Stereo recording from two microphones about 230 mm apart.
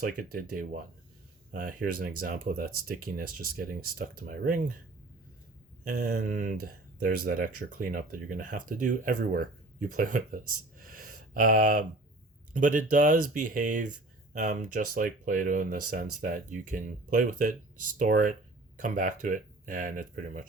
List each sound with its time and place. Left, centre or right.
0.0 s speech: right
5.8 s speech: right